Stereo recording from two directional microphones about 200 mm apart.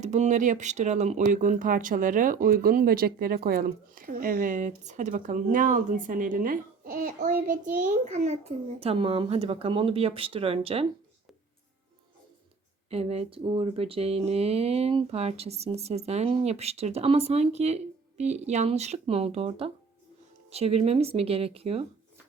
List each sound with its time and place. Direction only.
0.0 s speech: 35° right (ahead or behind)
12.9 s speech: 30° right (ahead or behind)